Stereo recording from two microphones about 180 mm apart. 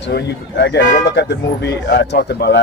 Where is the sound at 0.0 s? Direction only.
70° left (ahead or behind).